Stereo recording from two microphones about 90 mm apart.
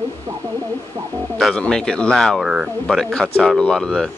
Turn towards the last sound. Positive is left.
turn(degrees=5)  # may be behind; listen again after turning